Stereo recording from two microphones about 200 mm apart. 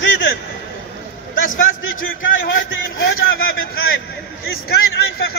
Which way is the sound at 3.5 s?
50° left (ahead or behind).